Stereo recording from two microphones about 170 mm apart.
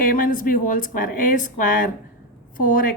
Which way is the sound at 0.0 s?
55° left (ahead or behind).